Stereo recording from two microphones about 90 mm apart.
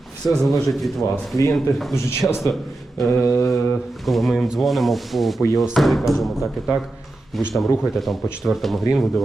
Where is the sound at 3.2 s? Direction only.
35° left (ahead or behind).